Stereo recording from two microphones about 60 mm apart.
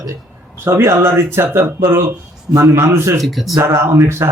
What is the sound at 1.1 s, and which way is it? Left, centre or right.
Speech, right.